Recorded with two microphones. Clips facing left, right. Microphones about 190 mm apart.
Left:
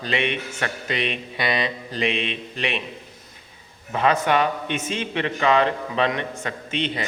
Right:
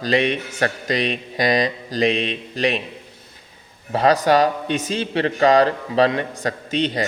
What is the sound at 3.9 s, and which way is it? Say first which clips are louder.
A man's voice: right 4 dB; 35° right (ahead or behind).